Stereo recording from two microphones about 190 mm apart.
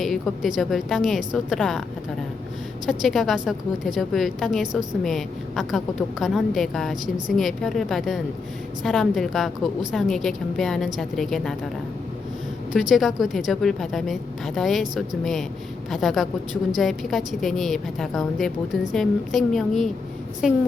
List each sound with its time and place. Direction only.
0.0 s a woman's voice: centre (ahead or behind)
2.8 s a woman's voice: centre (ahead or behind)
12.7 s a woman's voice: centre (ahead or behind)